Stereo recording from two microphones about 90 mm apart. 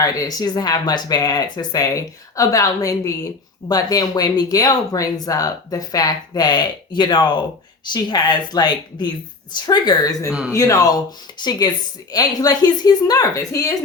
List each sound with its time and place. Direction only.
0.0 s speech: 45° left (ahead or behind)
11.3 s speech: 55° left (ahead or behind); by 13.7 s 35° left (ahead or behind)